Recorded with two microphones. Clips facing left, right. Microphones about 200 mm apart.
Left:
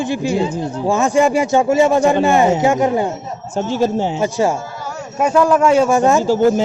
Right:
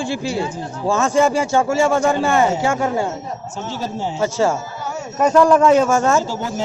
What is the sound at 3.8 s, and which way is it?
Speech, 60° left (ahead or behind).